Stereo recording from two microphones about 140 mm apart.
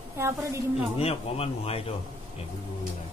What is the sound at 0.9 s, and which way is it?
Speech, 45° left (ahead or behind).